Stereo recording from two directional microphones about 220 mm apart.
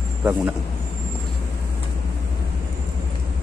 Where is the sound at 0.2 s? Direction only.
10° right (ahead or behind).